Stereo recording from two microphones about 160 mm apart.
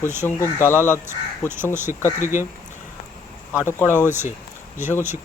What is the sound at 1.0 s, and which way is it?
Speech, 15° right (ahead or behind).